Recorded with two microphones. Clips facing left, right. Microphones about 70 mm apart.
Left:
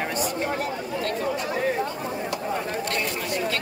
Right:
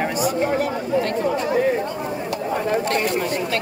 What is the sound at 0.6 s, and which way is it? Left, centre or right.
Chatter, right.